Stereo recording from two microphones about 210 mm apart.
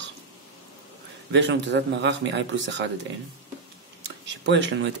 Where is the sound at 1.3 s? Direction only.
60° right (ahead or behind).